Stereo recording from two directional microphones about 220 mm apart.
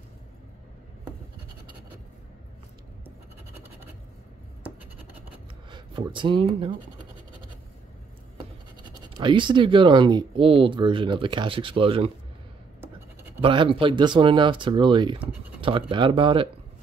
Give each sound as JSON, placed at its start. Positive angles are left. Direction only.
{"t": 5.7, "sound": "speech", "side_deg": -20}
{"t": 8.8, "sound": "speech", "side_deg": -20}
{"t": 13.4, "sound": "speech", "side_deg": -25}